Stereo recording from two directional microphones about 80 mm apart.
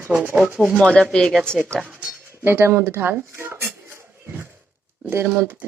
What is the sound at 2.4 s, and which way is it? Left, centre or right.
Speech, right.